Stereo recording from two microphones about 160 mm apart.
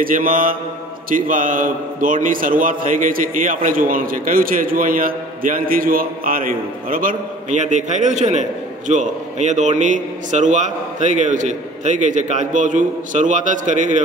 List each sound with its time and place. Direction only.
0.0 s mantra: 60° right (ahead or behind)
1.1 s a man's voice: 55° right (ahead or behind)